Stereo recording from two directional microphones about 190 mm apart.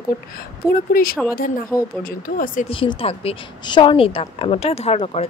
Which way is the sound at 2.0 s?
50° left (ahead or behind).